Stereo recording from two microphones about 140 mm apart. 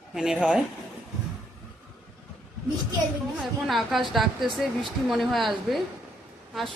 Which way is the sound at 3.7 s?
Centre (ahead or behind).